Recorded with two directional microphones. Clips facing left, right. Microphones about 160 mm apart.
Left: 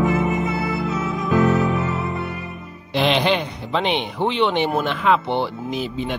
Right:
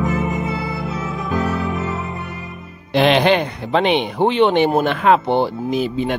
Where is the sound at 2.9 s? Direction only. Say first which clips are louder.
Right 5 dB; 60° right (ahead or behind).